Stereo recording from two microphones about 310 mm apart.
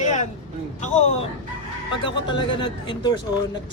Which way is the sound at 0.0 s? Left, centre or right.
Left.